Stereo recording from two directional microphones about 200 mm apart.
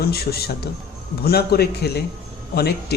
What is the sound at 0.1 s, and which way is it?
Speech, 50° left (ahead or behind).